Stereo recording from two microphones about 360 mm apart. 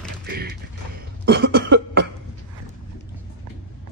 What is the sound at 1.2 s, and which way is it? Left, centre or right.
Cough, right.